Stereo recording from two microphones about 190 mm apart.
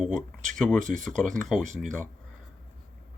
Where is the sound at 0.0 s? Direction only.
5° left (ahead or behind).